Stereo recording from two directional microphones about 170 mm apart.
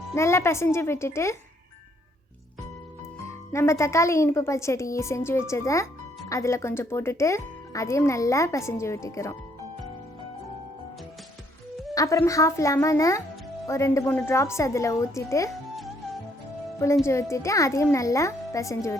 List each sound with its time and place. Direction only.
0.1 s speech: 15° left (ahead or behind)
3.0 s speech: 15° left (ahead or behind)
11.9 s a child's voice: 20° left (ahead or behind)
15.5 s music: centre (ahead or behind)
17.1 s a child's voice: 15° left (ahead or behind)